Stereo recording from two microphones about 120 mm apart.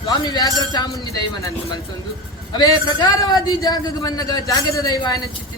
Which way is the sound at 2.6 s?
35° left (ahead or behind).